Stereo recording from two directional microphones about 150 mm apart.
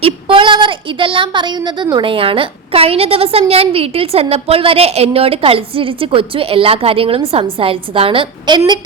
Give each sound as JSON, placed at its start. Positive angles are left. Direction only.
{"t": 0.0, "sound": "a woman's voice", "side_deg": -35}